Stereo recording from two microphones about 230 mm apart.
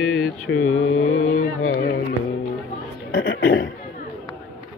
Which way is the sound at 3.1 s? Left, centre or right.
Left.